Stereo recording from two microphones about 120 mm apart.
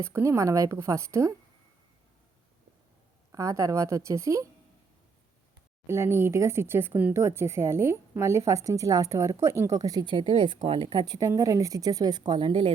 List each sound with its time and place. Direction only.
0.0 s speech: 25° right (ahead or behind)
3.3 s speech: 25° right (ahead or behind)
5.8 s speech: 20° right (ahead or behind); by 11.2 s 45° right (ahead or behind)
11.2 s a woman's voice: 30° right (ahead or behind); by 12.7 s 50° right (ahead or behind)